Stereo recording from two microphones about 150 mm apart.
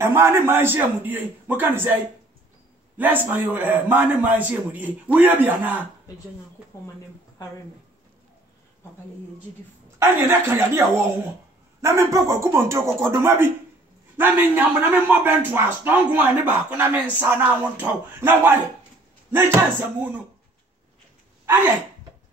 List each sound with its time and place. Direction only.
0.0 s a man's voice: 15° right (ahead or behind)
3.0 s a man's voice: 10° right (ahead or behind)
9.9 s a man's voice: 15° right (ahead or behind)